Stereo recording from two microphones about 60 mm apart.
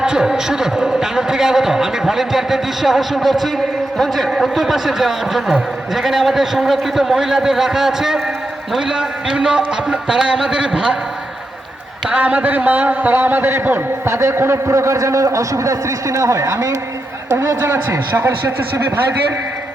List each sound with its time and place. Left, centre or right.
0.0 s a man's voice: centre
12.0 s a man's voice: right
14.1 s a man's voice: right
18.2 s speech: right